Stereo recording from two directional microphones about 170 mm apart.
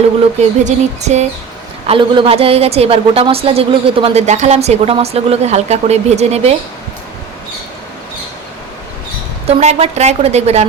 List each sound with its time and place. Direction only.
0.6 s speech: 40° right (ahead or behind)
1.9 s speech: 30° right (ahead or behind)
9.5 s speech: 40° right (ahead or behind)